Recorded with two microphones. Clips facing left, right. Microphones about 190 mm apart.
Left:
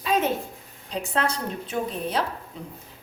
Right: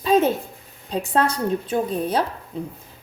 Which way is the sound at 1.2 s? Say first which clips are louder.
Right 6 dB; 35° right (ahead or behind).